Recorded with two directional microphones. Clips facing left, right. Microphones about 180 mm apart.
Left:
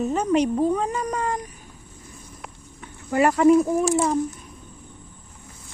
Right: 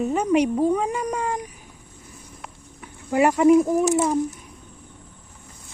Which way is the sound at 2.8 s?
10° right (ahead or behind).